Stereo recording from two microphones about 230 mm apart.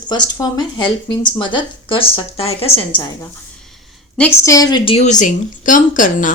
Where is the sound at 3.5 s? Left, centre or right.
Centre.